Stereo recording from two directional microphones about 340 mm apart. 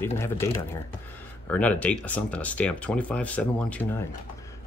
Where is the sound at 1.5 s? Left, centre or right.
Centre.